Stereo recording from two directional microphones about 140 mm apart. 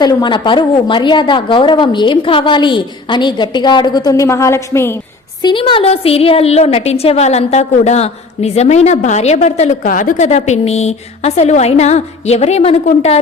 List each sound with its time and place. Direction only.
0.0 s a woman's voice: 30° left (ahead or behind)
5.4 s a woman's voice: 35° left (ahead or behind); by 13.1 s 50° left (ahead or behind)